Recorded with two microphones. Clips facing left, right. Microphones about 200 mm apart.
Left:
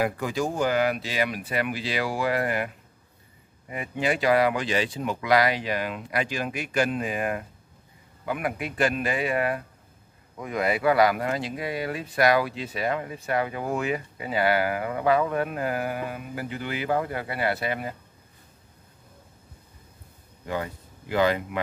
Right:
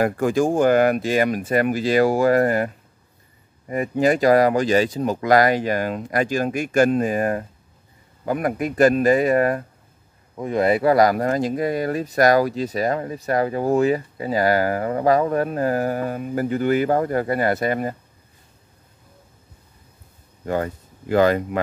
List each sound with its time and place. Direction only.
0.0 s speech: 50° right (ahead or behind)
10.3 s speech: 30° right (ahead or behind)
20.4 s speech: 45° right (ahead or behind)